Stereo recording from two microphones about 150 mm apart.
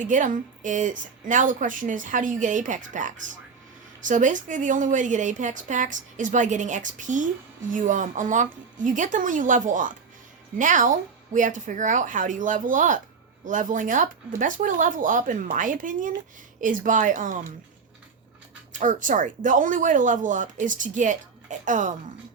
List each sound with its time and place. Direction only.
0.0 s a woman's voice: 60° right (ahead or behind)
18.7 s a woman's voice: 60° right (ahead or behind)